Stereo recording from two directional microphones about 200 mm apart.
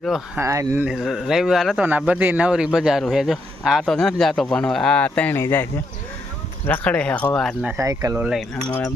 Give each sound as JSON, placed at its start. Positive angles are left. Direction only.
{"t": 0.0, "sound": "speech", "side_deg": 0}
{"t": 0.4, "sound": "speech", "side_deg": -15}
{"t": 7.8, "sound": "speech", "side_deg": -15}